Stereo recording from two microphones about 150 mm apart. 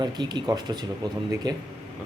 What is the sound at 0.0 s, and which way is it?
Speech, 30° right (ahead or behind).